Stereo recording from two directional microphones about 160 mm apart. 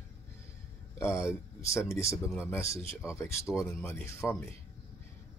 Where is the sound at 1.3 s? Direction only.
20° left (ahead or behind).